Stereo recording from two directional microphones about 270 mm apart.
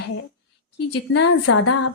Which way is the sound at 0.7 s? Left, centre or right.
Left.